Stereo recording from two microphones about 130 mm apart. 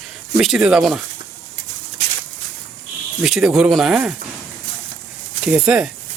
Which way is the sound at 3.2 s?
5° right (ahead or behind).